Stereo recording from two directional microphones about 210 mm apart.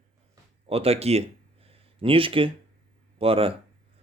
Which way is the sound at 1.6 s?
25° right (ahead or behind).